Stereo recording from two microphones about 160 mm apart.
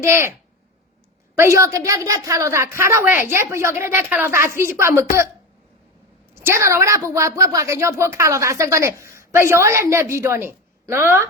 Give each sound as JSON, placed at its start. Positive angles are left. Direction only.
{"t": 0.0, "sound": "a woman's voice", "side_deg": -15}
{"t": 1.4, "sound": "a woman's voice", "side_deg": -20}
{"t": 6.3, "sound": "a woman's voice", "side_deg": -15}